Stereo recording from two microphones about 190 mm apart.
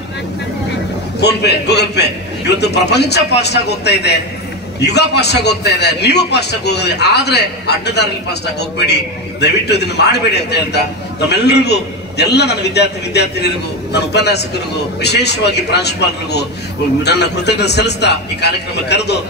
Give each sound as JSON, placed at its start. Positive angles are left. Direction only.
{"t": 1.2, "sound": "a man's voice", "side_deg": 60}